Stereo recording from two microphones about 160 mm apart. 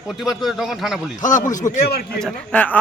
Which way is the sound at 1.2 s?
50° left (ahead or behind).